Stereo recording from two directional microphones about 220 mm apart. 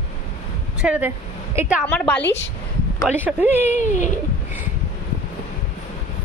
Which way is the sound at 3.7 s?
35° left (ahead or behind).